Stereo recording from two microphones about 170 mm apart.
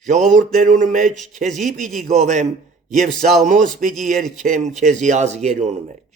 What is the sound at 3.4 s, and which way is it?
A man's voice, 50° right (ahead or behind).